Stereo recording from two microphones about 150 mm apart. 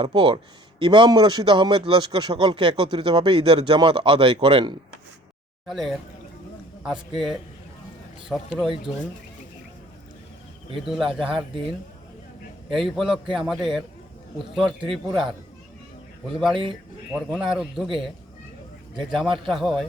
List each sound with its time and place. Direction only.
0.0 s speech: 35° right (ahead or behind)
5.6 s a man's voice: centre (ahead or behind)
10.8 s a man's voice: centre (ahead or behind)
12.7 s a man's voice: centre (ahead or behind)